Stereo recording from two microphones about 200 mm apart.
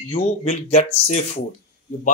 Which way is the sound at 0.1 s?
30° left (ahead or behind).